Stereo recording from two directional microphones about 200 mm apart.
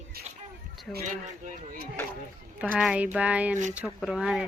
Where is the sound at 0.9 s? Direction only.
Centre (ahead or behind).